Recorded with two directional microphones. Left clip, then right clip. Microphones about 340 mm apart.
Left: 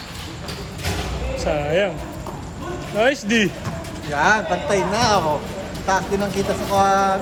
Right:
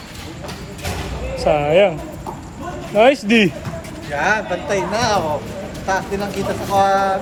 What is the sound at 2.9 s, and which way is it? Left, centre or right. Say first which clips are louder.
Speech: right 6 dB; centre.